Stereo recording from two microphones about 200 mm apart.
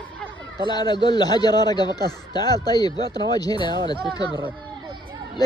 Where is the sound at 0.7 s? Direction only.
20° left (ahead or behind).